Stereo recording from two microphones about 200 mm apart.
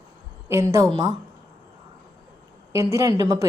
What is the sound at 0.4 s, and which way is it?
Speech, 15° right (ahead or behind).